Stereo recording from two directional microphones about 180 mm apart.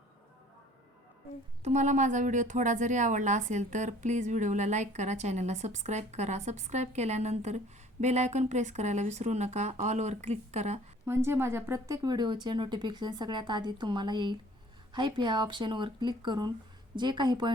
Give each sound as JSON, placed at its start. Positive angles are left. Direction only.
{"t": 1.6, "sound": "a woman's voice", "side_deg": -40}
{"t": 11.0, "sound": "a woman's voice", "side_deg": -15}